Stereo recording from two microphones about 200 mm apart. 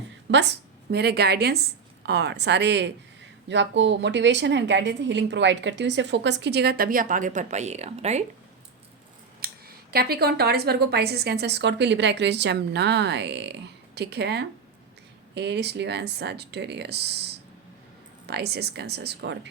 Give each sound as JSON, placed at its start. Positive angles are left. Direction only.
{"t": 0.3, "sound": "a woman's voice", "side_deg": -60}
{"t": 9.4, "sound": "speech", "side_deg": -50}